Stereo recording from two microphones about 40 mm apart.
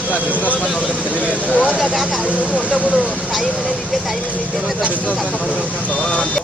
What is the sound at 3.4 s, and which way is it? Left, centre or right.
Speech, left.